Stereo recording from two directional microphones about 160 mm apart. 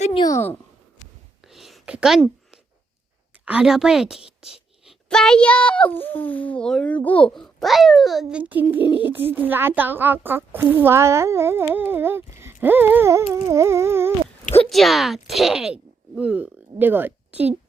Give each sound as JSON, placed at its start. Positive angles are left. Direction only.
{"t": 0.2, "sound": "speech", "side_deg": 20}
{"t": 1.5, "sound": "a sound", "side_deg": 0}
{"t": 3.4, "sound": "a child's voice", "side_deg": -5}
{"t": 14.5, "sound": "speech", "side_deg": 5}